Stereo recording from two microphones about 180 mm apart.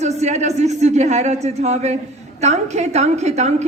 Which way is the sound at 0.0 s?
40° right (ahead or behind).